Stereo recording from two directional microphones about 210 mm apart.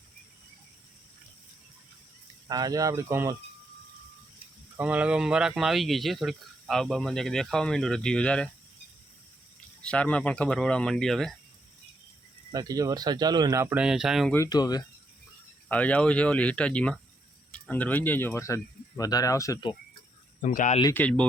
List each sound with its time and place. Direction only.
2.5 s speech: 20° right (ahead or behind)
4.8 s speech: 5° right (ahead or behind)
9.8 s speech: 5° left (ahead or behind)
12.5 s speech: 15° right (ahead or behind); by 14.3 s centre (ahead or behind)
14.3 s speech: 15° left (ahead or behind)
15.7 s speech: 5° left (ahead or behind)
20.4 s speech: 35° left (ahead or behind)
20.9 s speech: 5° left (ahead or behind)